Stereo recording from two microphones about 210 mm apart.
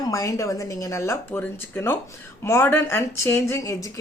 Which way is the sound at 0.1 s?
15° left (ahead or behind).